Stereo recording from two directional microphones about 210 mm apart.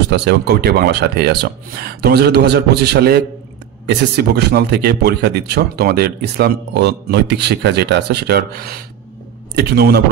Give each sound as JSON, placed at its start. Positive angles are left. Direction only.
{"t": 0.1, "sound": "speech", "side_deg": -55}